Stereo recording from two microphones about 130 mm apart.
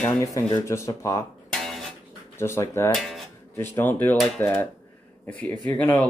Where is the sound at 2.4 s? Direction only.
20° left (ahead or behind).